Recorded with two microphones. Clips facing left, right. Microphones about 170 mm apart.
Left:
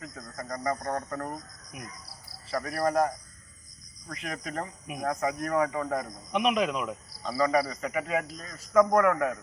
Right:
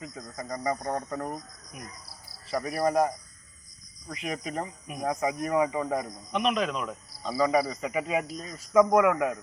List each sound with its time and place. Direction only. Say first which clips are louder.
0.0 s speech: right 1 dB; 20° right (ahead or behind)
0.4 s speech: right 1 dB; 5° right (ahead or behind)
2.5 s speech: right 1 dB; 20° right (ahead or behind)
4.1 s speech: right 2 dB; 20° right (ahead or behind)
6.3 s speech: left 1 dB; 10° left (ahead or behind)
7.3 s speech: right 1 dB; 20° right (ahead or behind)